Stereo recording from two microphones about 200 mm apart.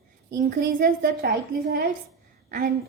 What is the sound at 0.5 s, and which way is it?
A woman's voice, 45° right (ahead or behind).